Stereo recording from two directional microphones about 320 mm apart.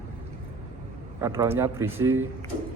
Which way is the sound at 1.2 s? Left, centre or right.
Centre.